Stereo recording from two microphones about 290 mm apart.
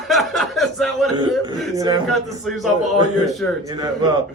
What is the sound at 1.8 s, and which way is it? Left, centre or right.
Speech, centre.